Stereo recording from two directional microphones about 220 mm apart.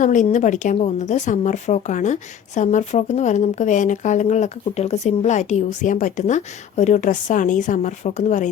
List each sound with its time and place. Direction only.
0.0 s speech: 35° left (ahead or behind)